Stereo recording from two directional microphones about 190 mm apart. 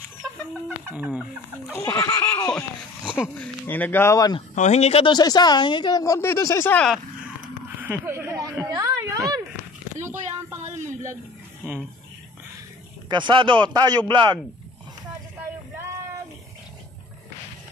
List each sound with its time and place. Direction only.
0.8 s chicken: 5° right (ahead or behind)
1.7 s a sound: 15° left (ahead or behind)
3.3 s speech: 10° left (ahead or behind)
4.6 s speech: 35° left (ahead or behind); by 7.0 s 5° left (ahead or behind)
7.8 s a sound: 10° right (ahead or behind)
13.1 s a man's voice: 25° right (ahead or behind)